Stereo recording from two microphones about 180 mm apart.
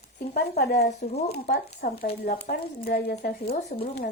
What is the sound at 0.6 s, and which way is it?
Speech, 65° left (ahead or behind).